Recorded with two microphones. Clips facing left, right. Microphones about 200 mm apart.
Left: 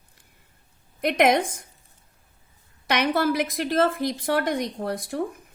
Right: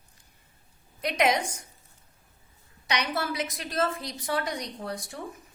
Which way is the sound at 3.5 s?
55° left (ahead or behind).